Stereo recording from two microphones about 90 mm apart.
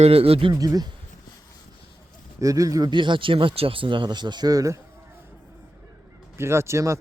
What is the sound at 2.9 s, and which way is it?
Speech, 65° right (ahead or behind).